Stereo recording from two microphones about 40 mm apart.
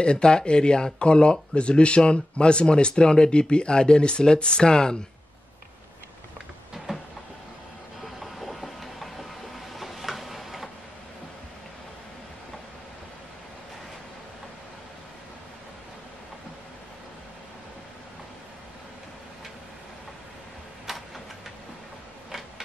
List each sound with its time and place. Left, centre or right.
0.0 s speech: left
6.9 s a sound: centre
8.0 s vehicle: centre
9.8 s tick-tock: centre